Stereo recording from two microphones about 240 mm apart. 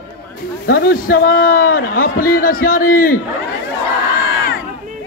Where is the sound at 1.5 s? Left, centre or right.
Left.